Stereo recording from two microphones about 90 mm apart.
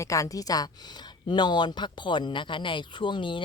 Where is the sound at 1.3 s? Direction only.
55° left (ahead or behind).